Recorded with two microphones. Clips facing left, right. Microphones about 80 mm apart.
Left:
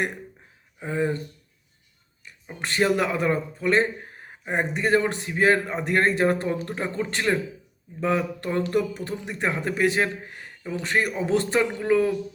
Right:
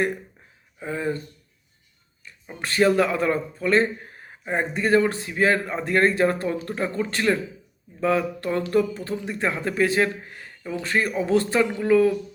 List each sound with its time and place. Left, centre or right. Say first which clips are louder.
0.8 s a man's voice: left 1 dB; left
2.2 s a man's voice: even; left